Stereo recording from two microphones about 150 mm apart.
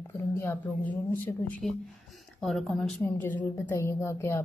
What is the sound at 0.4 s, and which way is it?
Speech, 15° left (ahead or behind).